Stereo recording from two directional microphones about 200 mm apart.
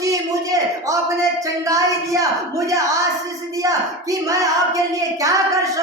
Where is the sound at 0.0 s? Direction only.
15° right (ahead or behind).